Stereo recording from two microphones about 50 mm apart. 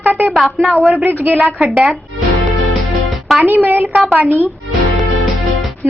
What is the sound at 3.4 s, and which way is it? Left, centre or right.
Speech, right.